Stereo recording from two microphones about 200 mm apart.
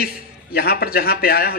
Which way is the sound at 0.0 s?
50° left (ahead or behind).